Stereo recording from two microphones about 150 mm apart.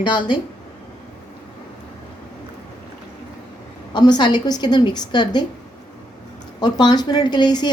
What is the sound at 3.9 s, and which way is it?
A woman's voice, 30° left (ahead or behind).